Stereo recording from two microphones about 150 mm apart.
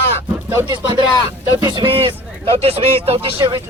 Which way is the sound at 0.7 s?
30° right (ahead or behind).